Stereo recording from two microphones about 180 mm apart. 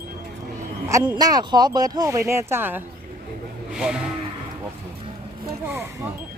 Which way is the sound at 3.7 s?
5° right (ahead or behind).